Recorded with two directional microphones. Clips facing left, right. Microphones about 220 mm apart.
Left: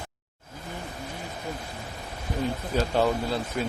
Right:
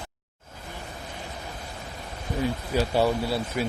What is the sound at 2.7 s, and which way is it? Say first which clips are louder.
Speech: right 1 dB; 10° right (ahead or behind).